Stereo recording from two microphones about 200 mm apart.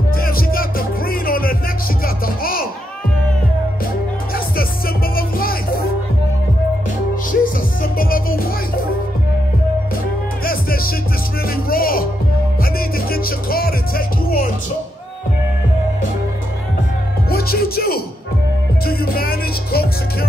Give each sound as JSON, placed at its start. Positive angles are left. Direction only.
{"t": 0.1, "sound": "music", "side_deg": 45}
{"t": 4.3, "sound": "music", "side_deg": 45}
{"t": 7.3, "sound": "music", "side_deg": 50}
{"t": 10.4, "sound": "music", "side_deg": 45}
{"t": 17.3, "sound": "music", "side_deg": 50}